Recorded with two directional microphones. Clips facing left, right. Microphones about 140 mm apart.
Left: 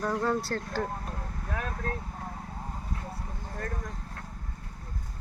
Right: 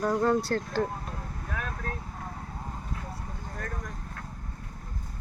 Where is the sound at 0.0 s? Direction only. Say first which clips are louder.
Right 3 dB; 10° right (ahead or behind).